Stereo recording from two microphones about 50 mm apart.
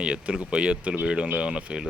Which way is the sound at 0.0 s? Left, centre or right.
Right.